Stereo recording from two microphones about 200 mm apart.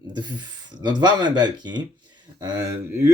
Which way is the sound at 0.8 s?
20° right (ahead or behind).